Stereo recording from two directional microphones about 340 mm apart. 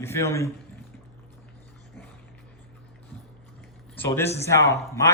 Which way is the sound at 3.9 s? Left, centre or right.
Centre.